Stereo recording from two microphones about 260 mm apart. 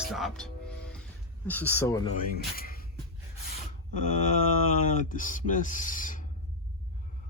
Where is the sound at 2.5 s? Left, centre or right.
Left.